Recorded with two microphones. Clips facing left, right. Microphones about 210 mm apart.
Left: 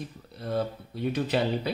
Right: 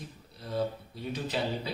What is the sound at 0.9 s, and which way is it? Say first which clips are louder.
Speech: left 8 dB; 65° left (ahead or behind).